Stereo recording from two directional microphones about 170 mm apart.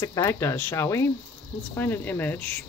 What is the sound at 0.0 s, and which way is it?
Speech, 15° left (ahead or behind).